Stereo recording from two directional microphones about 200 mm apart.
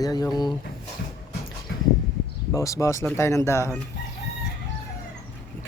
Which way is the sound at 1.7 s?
60° left (ahead or behind).